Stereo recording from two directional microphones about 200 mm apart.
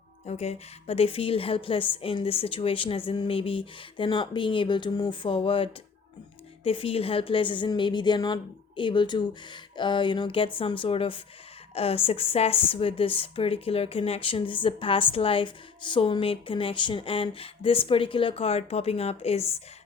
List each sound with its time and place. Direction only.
0.3 s speech: 30° left (ahead or behind)